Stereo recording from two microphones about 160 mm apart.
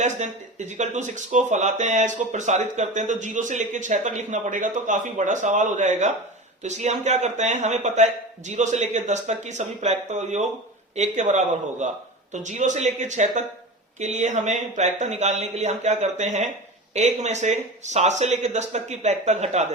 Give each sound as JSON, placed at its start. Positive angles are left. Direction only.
{"t": 0.0, "sound": "speech", "side_deg": -50}